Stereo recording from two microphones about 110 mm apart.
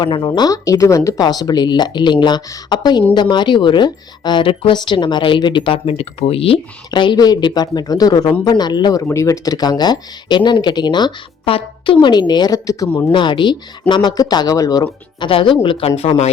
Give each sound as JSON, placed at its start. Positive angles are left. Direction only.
{"t": 0.0, "sound": "speech", "side_deg": 40}
{"t": 9.0, "sound": "speech", "side_deg": 30}
{"t": 11.4, "sound": "speech", "side_deg": 55}
{"t": 13.1, "sound": "speech", "side_deg": 50}
{"t": 15.3, "sound": "speech", "side_deg": 50}
{"t": 16.0, "sound": "speech", "side_deg": 70}